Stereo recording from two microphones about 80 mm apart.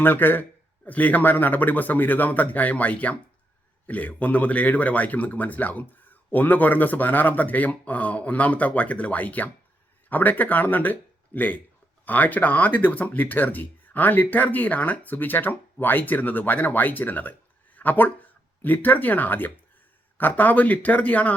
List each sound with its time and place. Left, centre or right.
0.0 s speech: left